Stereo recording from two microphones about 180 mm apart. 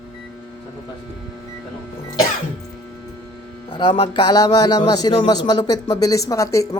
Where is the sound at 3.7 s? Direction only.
25° left (ahead or behind).